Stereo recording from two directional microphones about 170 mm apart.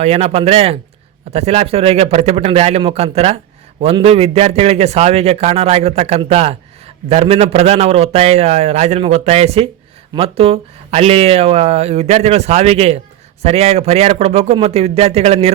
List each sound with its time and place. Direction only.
0.0 s a man's voice: 40° right (ahead or behind)